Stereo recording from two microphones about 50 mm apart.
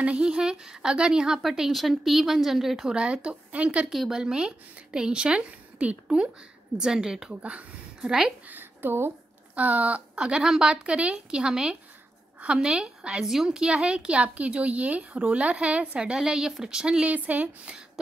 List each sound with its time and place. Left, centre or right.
0.0 s a woman's voice: right
1.6 s speech: centre
2.9 s a woman's voice: centre
6.8 s a woman's voice: centre
7.4 s speech: right
8.5 s a woman's voice: right
9.6 s a woman's voice: right
10.1 s a woman's voice: centre
17.1 s speech: right